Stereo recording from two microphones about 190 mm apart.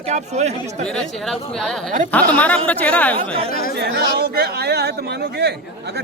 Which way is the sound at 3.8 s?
60° right (ahead or behind).